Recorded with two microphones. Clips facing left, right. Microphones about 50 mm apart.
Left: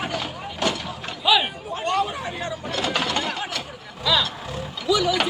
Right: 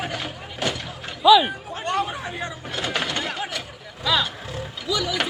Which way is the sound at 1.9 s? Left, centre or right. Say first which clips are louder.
Left 1 dB; right.